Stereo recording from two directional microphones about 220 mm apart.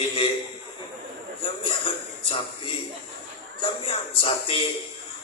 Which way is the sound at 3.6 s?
25° left (ahead or behind).